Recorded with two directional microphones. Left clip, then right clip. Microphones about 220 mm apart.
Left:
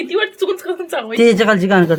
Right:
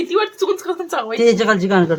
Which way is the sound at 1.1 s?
15° left (ahead or behind).